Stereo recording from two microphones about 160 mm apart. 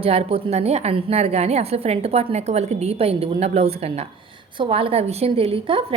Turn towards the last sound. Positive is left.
turn(degrees=-35)  # may be behind; listen again after turning